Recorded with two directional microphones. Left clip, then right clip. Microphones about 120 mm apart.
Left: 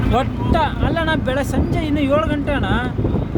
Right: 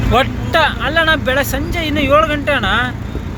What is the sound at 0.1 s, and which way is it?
Speech, 10° left (ahead or behind).